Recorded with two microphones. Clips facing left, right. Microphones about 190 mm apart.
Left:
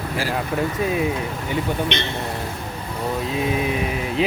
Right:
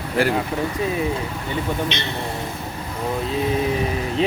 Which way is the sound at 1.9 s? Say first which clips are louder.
Left 3 dB; 55° left (ahead or behind).